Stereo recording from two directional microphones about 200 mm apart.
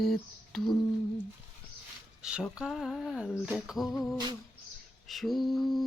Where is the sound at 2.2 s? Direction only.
5° right (ahead or behind).